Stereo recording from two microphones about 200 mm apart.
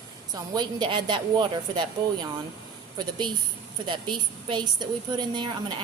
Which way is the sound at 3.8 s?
25° right (ahead or behind).